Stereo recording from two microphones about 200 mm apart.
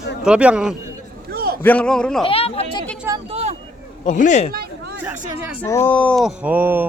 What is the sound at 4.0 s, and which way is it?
Speech, 40° left (ahead or behind).